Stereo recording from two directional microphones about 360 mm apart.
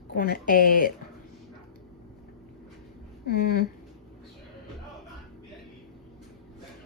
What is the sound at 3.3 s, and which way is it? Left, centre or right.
Speech, left.